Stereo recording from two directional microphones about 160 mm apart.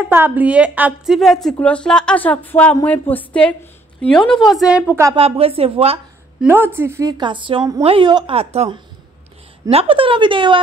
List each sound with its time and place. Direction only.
0.0 s a woman's voice: 10° right (ahead or behind)
5.1 s speech: 35° right (ahead or behind)
6.4 s a woman's voice: 15° right (ahead or behind); by 8.6 s 40° right (ahead or behind)
9.7 s speech: 35° right (ahead or behind)